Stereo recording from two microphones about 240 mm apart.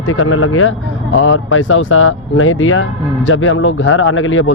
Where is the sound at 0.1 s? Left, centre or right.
Left.